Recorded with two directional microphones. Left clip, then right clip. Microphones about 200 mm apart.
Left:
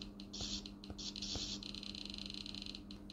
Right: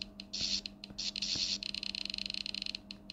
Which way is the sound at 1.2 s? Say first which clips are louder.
Right 9 dB; 20° right (ahead or behind).